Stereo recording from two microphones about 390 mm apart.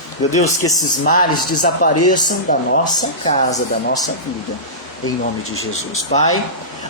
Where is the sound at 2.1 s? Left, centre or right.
Centre.